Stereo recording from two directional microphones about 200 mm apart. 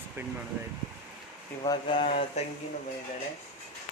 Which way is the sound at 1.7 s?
25° left (ahead or behind).